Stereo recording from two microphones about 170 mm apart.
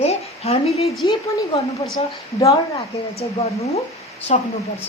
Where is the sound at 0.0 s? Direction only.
40° left (ahead or behind).